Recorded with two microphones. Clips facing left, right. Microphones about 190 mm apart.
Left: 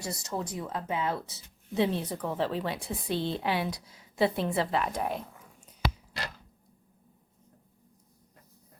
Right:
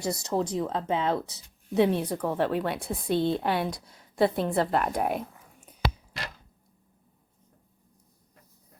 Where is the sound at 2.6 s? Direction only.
55° right (ahead or behind).